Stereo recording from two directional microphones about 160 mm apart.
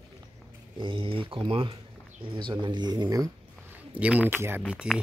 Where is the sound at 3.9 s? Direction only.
10° right (ahead or behind).